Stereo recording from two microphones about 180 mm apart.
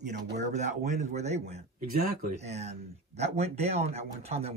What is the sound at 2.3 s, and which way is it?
Speech, 35° right (ahead or behind).